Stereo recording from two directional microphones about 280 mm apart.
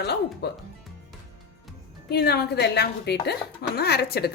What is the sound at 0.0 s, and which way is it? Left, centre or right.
Speech, left.